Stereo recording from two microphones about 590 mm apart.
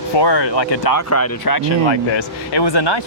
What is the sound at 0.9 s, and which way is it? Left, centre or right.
Speech, left.